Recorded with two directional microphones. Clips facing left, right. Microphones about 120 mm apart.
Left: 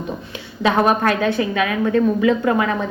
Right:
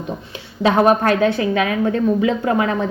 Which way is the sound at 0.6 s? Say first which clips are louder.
Right 2 dB; 35° right (ahead or behind).